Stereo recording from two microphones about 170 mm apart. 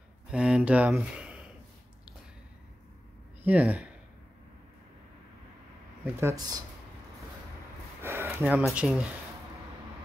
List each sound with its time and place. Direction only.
0.3 s speech: 5° right (ahead or behind)
3.4 s speech: 10° right (ahead or behind)
6.0 s speech: 15° right (ahead or behind)
8.0 s speech: 15° right (ahead or behind)